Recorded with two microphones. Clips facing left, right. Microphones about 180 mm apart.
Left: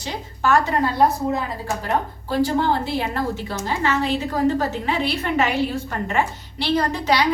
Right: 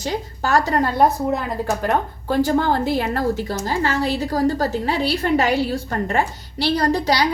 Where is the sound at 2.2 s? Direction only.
50° right (ahead or behind).